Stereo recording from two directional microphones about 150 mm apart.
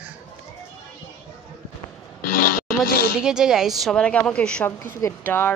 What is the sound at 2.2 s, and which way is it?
Speech, 70° left (ahead or behind).